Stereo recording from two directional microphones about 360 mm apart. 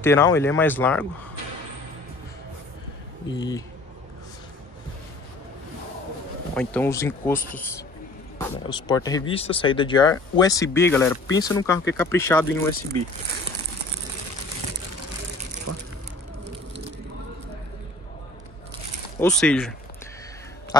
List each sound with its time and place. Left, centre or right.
0.0 s speech: centre
3.3 s speech: centre
6.5 s speech: centre
15.7 s a sound: right
19.1 s speech: centre